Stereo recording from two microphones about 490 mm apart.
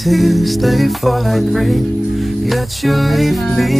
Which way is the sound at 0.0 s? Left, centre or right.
Centre.